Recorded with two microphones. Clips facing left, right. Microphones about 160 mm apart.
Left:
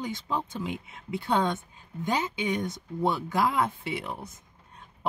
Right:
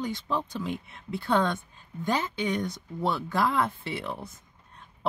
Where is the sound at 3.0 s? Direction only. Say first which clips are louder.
Left 1 dB; 15° left (ahead or behind).